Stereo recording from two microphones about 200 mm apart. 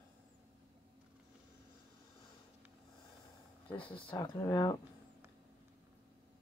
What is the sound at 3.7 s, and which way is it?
Speech, 25° left (ahead or behind).